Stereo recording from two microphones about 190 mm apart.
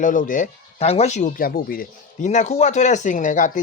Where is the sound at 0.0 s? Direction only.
45° left (ahead or behind).